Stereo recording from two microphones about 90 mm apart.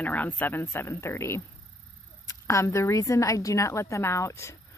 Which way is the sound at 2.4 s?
35° left (ahead or behind).